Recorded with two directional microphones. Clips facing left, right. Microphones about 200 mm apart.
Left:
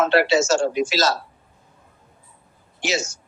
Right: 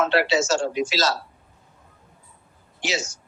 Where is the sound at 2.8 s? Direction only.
45° left (ahead or behind).